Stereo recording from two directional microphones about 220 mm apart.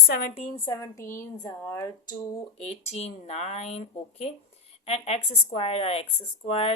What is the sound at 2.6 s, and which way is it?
A woman's voice, 30° left (ahead or behind).